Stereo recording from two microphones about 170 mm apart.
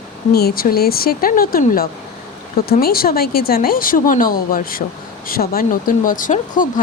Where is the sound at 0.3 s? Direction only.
65° left (ahead or behind).